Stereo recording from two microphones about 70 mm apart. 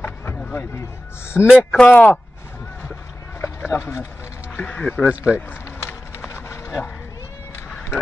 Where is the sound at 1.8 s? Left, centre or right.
Left.